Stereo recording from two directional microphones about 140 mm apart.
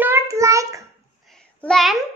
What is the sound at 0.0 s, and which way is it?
Child singing, 20° right (ahead or behind).